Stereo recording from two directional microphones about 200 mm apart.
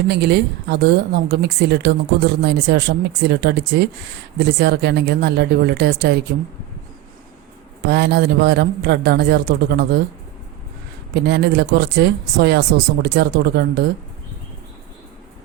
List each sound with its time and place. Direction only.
0.1 s a woman's voice: 55° right (ahead or behind)
7.9 s a woman's voice: 55° right (ahead or behind)
11.1 s a woman's voice: 55° right (ahead or behind)